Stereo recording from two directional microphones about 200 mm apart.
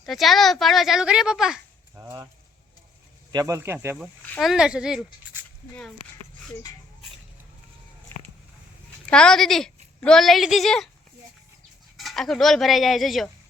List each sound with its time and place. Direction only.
0.1 s speech: centre (ahead or behind)
3.3 s speech: 15° right (ahead or behind)
4.3 s speech: centre (ahead or behind)
9.0 s a woman's voice: 5° left (ahead or behind)
11.9 s speech: centre (ahead or behind)